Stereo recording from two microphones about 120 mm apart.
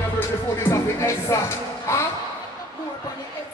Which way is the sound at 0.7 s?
25° left (ahead or behind).